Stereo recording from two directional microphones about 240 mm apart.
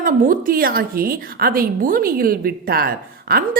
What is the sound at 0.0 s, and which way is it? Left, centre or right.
A woman's voice, right.